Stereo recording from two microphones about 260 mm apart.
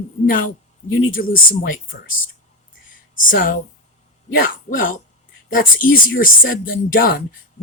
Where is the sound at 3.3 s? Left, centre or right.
Left.